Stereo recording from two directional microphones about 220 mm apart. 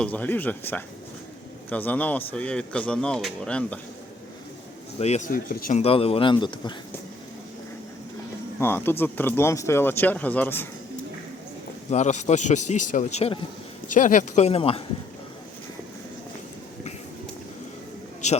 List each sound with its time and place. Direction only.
0.0 s speech: 5° left (ahead or behind)
4.9 s speech: 30° left (ahead or behind)
5.8 s a man's voice: 25° left (ahead or behind)
8.5 s speech: 10° left (ahead or behind)
11.9 s a man's voice: 30° left (ahead or behind)